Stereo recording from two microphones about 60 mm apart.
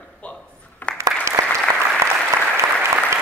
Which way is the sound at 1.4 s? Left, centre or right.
Right.